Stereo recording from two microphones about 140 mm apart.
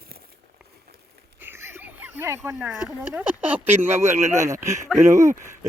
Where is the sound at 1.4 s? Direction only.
15° right (ahead or behind).